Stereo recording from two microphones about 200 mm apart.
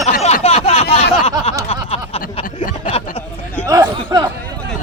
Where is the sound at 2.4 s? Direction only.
45° left (ahead or behind).